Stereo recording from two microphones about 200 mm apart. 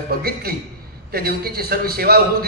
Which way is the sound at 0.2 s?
50° right (ahead or behind).